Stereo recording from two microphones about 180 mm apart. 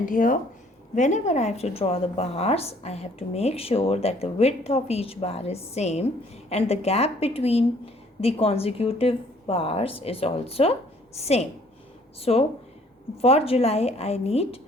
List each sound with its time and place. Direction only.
0.0 s a woman's voice: 50° left (ahead or behind)